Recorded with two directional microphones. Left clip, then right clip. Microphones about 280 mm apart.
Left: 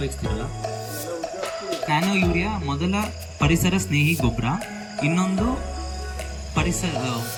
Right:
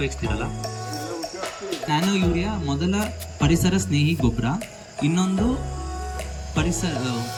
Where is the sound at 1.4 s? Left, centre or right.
Centre.